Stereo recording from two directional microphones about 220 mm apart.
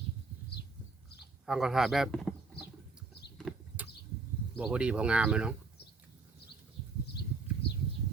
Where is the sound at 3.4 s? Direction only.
Centre (ahead or behind).